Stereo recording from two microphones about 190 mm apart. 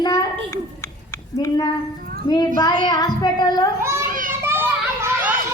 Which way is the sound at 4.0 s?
45° right (ahead or behind).